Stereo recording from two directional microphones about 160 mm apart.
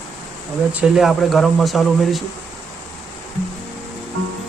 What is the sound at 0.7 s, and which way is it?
Speech, 5° right (ahead or behind).